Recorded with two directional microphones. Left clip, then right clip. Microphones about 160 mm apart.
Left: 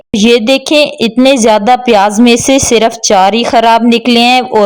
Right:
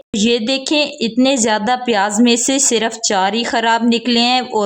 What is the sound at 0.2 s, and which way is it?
A woman's voice, 35° left (ahead or behind).